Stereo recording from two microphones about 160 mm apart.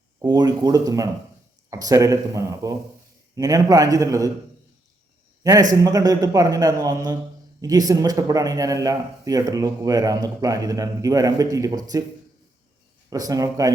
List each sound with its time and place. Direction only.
0.2 s a man's voice: 25° right (ahead or behind)
5.4 s a man's voice: 25° right (ahead or behind)
13.1 s a man's voice: 25° right (ahead or behind)